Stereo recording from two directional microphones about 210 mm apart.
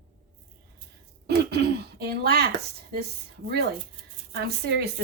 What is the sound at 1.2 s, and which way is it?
Throat clearing, 50° right (ahead or behind).